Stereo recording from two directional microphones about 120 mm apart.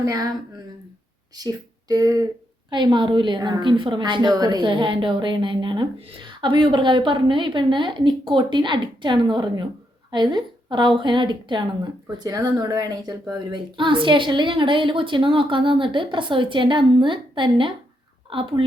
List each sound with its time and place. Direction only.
0.0 s a woman's voice: 30° right (ahead or behind)
1.4 s a woman's voice: 35° right (ahead or behind)